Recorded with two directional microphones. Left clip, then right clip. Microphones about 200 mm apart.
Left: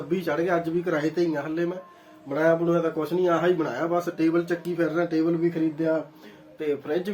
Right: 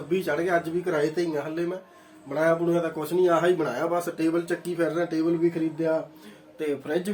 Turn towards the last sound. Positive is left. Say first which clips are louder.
# left 1 dB
turn(degrees=-20)  # may be behind; listen again after turning